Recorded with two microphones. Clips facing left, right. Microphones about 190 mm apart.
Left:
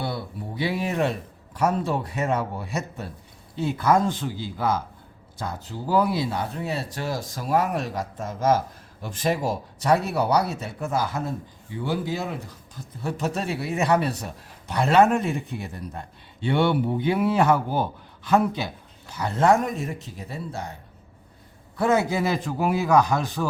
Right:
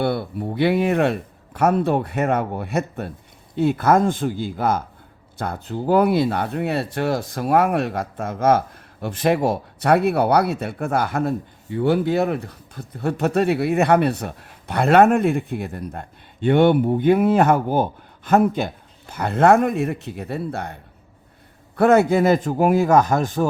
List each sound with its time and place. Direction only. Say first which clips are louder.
0.0 s a man's voice: right 8 dB; 60° right (ahead or behind)
21.8 s a man's voice: right 7 dB; 60° right (ahead or behind)